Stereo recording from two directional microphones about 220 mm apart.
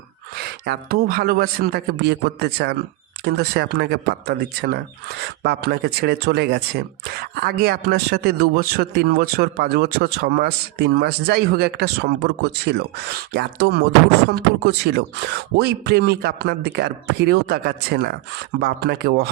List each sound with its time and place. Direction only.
0.6 s speech: 45° right (ahead or behind)
14.9 s speech: 50° right (ahead or behind)